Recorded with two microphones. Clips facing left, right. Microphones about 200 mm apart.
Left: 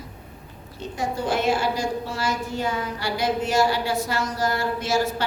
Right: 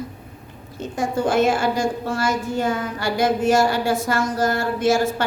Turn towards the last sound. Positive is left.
turn(degrees=-50)  # may be behind; listen again after turning